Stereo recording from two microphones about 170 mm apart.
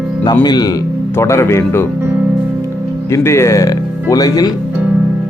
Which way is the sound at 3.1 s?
15° left (ahead or behind).